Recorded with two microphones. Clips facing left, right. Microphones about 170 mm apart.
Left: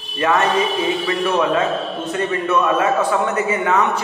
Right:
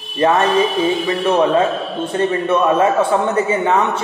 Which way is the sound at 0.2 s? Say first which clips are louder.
Right 3 dB; 30° right (ahead or behind).